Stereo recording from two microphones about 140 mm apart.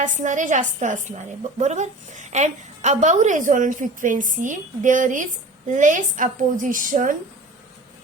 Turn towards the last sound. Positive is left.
turn(degrees=-75)  # may be behind; listen again after turning